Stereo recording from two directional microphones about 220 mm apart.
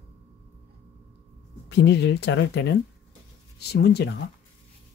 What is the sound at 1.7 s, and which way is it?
Speech, 50° left (ahead or behind).